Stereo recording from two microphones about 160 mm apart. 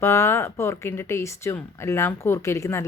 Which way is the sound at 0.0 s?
15° left (ahead or behind).